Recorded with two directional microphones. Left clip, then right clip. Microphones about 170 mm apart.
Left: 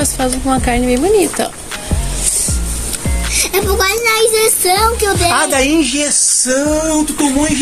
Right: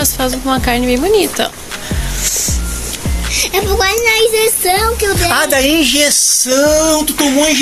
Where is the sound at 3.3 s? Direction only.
90° left.